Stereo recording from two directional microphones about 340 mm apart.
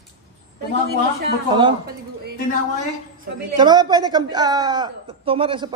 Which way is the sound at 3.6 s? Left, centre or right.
Centre.